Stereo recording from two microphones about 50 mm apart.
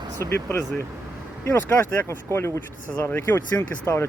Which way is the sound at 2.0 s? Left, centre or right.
Left.